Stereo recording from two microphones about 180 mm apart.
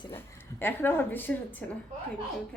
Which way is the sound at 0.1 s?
10° left (ahead or behind).